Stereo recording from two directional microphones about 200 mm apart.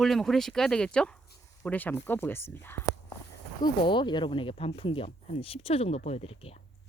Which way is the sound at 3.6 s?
25° left (ahead or behind).